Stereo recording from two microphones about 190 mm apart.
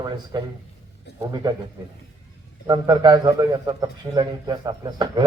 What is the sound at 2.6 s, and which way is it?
A man's voice, 20° right (ahead or behind).